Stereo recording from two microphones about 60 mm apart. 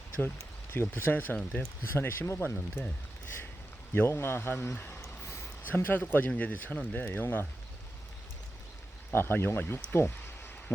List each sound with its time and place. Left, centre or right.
0.7 s speech: left
3.9 s speech: left
5.0 s a sound: left
5.6 s speech: left
9.1 s speech: left
9.9 s a sound: left